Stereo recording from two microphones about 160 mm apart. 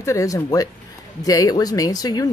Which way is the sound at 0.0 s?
20° left (ahead or behind).